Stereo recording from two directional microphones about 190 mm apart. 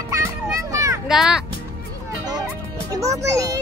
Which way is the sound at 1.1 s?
5° right (ahead or behind).